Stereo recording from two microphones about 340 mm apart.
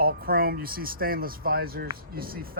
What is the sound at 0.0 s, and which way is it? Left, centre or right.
Speech, right.